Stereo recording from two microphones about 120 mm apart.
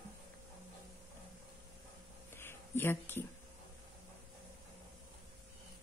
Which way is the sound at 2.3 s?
20° left (ahead or behind).